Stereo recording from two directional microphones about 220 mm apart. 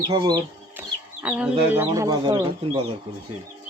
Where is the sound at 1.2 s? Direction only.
5° right (ahead or behind).